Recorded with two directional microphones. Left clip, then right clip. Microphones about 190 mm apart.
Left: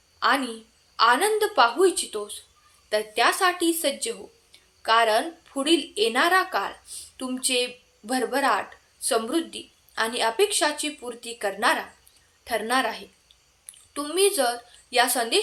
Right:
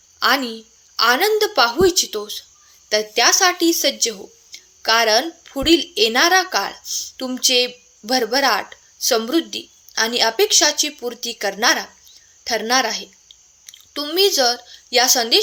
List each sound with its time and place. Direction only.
0.2 s a woman's voice: 40° right (ahead or behind)